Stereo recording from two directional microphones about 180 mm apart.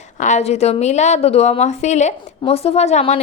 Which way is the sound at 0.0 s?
40° left (ahead or behind).